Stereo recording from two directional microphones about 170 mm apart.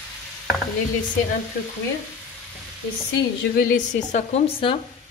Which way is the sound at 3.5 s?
50° left (ahead or behind).